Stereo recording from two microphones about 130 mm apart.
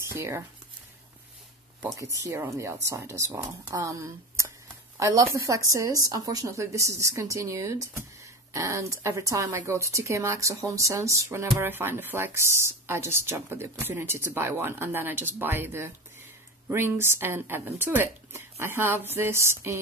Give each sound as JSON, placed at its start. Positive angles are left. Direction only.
{"t": 0.0, "sound": "speech", "side_deg": -20}
{"t": 2.1, "sound": "a woman's voice", "side_deg": -20}